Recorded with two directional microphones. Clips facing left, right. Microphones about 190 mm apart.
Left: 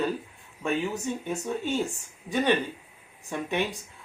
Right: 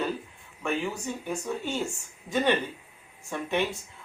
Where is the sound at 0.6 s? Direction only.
20° left (ahead or behind).